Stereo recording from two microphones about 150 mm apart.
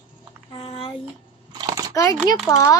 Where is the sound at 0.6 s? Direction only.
35° left (ahead or behind).